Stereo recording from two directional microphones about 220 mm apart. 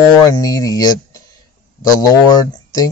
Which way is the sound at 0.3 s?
15° left (ahead or behind).